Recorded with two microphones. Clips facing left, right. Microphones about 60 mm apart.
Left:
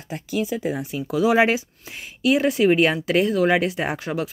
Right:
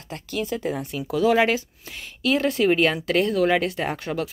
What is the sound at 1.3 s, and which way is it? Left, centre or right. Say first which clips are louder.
Speech: left 2 dB; centre.